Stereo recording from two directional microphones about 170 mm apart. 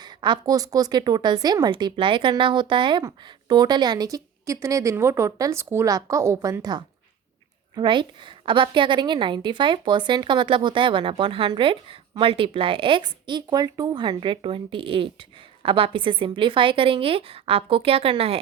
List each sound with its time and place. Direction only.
0.0 s a woman's voice: 25° right (ahead or behind)